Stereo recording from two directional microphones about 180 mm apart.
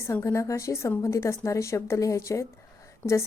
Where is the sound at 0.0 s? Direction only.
15° left (ahead or behind).